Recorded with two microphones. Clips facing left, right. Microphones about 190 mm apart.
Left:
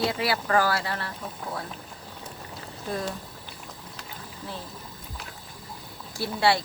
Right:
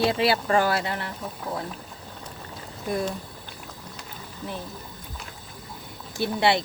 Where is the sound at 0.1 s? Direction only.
25° right (ahead or behind).